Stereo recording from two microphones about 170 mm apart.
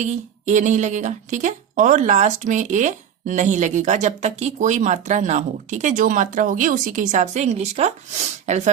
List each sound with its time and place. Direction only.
0.0 s speech: 45° right (ahead or behind)